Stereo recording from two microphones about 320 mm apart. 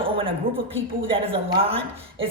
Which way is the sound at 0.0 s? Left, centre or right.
Centre.